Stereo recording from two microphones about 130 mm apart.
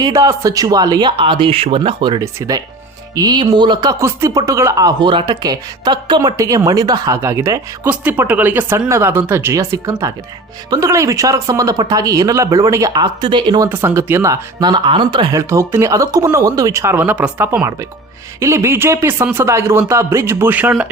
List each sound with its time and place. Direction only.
0.0 s speech: 25° right (ahead or behind)
2.2 s speech: 25° right (ahead or behind)
7.9 s speech: 15° right (ahead or behind); by 13.7 s 35° right (ahead or behind)
13.7 s speech: 20° right (ahead or behind)